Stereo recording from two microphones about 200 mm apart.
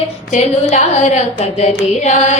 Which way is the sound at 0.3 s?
35° left (ahead or behind).